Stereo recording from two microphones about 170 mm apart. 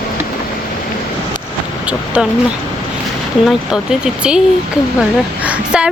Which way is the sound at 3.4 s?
5° right (ahead or behind).